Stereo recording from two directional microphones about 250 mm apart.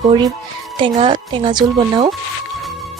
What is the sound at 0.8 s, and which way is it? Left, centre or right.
Speech, centre.